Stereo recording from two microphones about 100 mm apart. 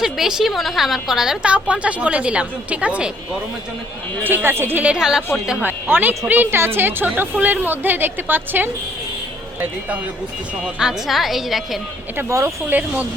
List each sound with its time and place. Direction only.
0.0 s a woman's voice: 5° right (ahead or behind)
4.2 s a woman's voice: 20° right (ahead or behind)
5.6 s a woman's voice: 20° right (ahead or behind)
10.8 s a woman's voice: 5° right (ahead or behind)
12.1 s speech: 30° right (ahead or behind)
12.7 s a woman's voice: 20° right (ahead or behind)